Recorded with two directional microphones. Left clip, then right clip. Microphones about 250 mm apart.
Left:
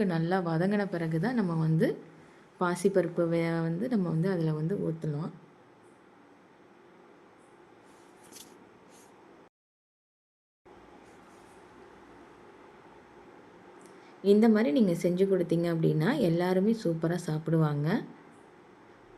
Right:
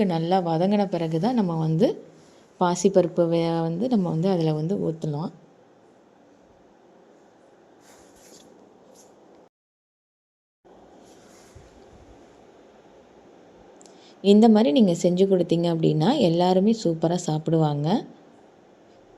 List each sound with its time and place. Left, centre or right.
0.0 s a woman's voice: centre
13.8 s a woman's voice: centre